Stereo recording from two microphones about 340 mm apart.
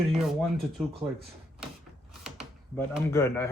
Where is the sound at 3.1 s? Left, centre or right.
Centre.